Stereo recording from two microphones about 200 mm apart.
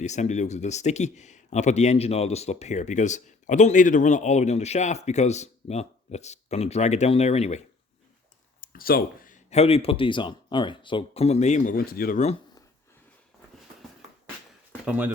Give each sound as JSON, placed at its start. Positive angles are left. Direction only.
{"t": 0.0, "sound": "speech", "side_deg": 35}
{"t": 8.6, "sound": "speech", "side_deg": 45}
{"t": 14.8, "sound": "speech", "side_deg": -10}